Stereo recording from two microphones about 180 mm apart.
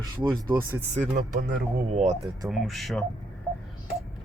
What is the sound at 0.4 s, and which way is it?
Speech, 10° right (ahead or behind).